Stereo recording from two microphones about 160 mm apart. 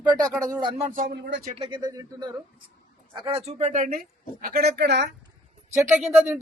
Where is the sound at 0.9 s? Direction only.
65° right (ahead or behind).